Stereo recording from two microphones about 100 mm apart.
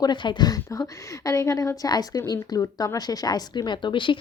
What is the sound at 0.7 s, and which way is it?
A woman's voice, 35° left (ahead or behind).